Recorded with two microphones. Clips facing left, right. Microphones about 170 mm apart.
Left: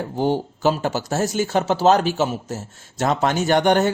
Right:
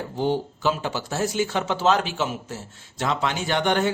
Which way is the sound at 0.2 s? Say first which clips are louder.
Left 3 dB; 45° left (ahead or behind).